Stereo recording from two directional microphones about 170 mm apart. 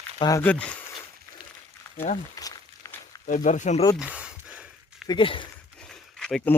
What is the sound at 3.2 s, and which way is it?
Speech, 45° left (ahead or behind).